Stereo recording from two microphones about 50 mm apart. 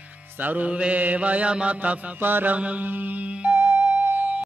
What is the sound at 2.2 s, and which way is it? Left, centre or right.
Mantra, right.